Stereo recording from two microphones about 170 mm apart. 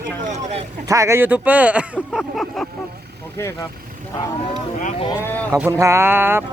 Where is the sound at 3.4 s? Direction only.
15° left (ahead or behind).